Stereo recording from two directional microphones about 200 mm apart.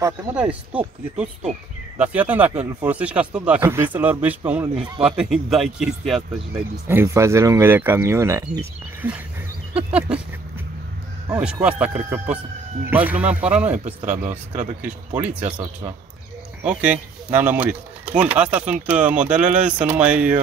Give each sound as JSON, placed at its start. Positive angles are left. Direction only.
{"t": 0.0, "sound": "speech", "side_deg": -10}
{"t": 6.9, "sound": "speech", "side_deg": -10}
{"t": 11.2, "sound": "speech", "side_deg": -10}
{"t": 14.5, "sound": "speech", "side_deg": -35}
{"t": 16.6, "sound": "speech", "side_deg": -5}